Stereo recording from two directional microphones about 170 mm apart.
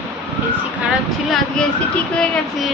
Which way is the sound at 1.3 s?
5° left (ahead or behind).